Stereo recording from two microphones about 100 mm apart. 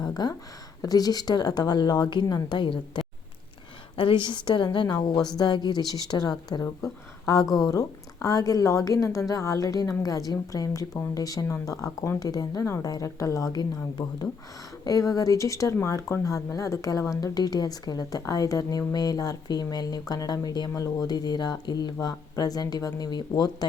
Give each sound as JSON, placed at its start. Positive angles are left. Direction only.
{"t": 0.0, "sound": "speech", "side_deg": 45}